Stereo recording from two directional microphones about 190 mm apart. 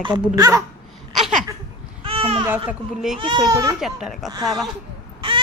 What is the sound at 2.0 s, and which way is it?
Babbling, 30° right (ahead or behind).